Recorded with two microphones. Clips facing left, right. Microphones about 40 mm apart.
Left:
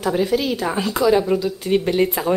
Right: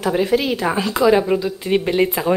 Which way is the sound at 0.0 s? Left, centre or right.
Right.